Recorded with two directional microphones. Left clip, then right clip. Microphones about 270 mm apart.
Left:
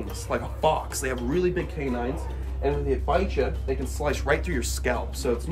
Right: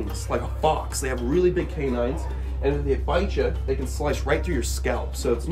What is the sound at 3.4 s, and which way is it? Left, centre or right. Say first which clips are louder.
Speech: right 2 dB; centre.